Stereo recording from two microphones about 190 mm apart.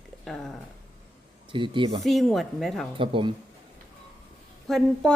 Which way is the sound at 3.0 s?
25° right (ahead or behind).